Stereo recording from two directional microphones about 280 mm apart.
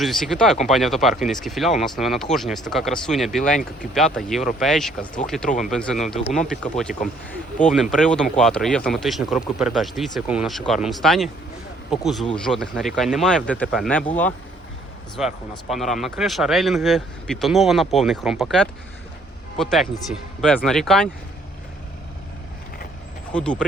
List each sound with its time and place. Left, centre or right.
0.0 s speech: centre
6.1 s speech: left
6.5 s speech: centre
23.3 s speech: centre